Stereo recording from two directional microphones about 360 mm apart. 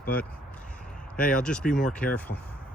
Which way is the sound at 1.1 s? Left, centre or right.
Centre.